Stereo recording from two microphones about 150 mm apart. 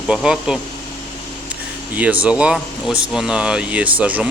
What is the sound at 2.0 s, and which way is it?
Speech, 10° right (ahead or behind).